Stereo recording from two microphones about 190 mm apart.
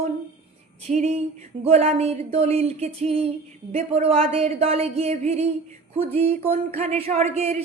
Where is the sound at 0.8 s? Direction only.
35° right (ahead or behind).